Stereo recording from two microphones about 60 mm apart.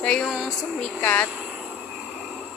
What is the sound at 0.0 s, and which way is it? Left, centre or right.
Speech, centre.